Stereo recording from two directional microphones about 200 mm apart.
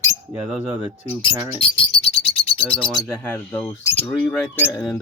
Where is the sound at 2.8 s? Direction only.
5° left (ahead or behind).